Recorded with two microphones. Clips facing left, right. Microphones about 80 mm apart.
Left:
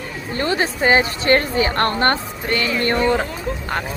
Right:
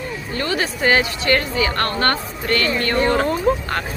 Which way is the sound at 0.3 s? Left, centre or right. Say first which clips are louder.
Left 3 dB; left.